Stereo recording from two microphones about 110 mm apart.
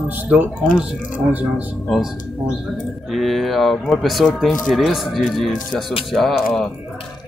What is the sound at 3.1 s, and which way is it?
Speech, centre (ahead or behind).